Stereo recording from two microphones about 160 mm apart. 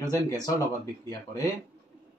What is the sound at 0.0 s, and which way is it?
Speech, 25° left (ahead or behind).